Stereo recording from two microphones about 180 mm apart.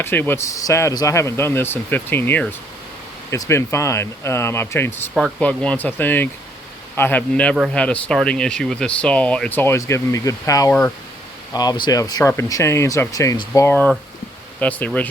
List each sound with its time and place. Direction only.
0.0 s speech: 10° left (ahead or behind)
5.1 s speech: centre (ahead or behind)